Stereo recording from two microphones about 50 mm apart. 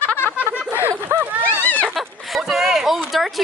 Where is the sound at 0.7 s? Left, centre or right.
Right.